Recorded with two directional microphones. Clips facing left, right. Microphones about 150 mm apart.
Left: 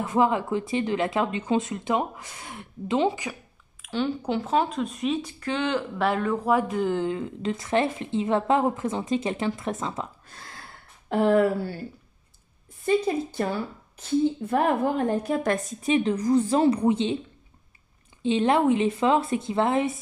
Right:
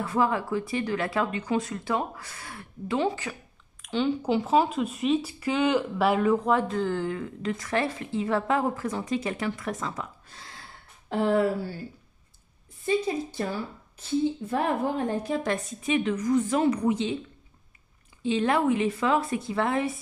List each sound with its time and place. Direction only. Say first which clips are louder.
0.0 s a woman's voice: left 3 dB; 20° left (ahead or behind)
3.8 s speech: right 1 dB; centre (ahead or behind)
6.5 s a woman's voice: left 2 dB; 15° left (ahead or behind)
11.1 s a woman's voice: left 3 dB; 55° left (ahead or behind)
12.8 s a woman's voice: left 3 dB; 55° left (ahead or behind)
15.2 s a woman's voice: left 3 dB; 50° left (ahead or behind)
15.9 s speech: left 3 dB; 35° left (ahead or behind)
18.2 s a woman's voice: left 3 dB; 25° left (ahead or behind)